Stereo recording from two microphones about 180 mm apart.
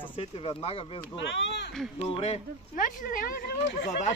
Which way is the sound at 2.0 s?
35° left (ahead or behind).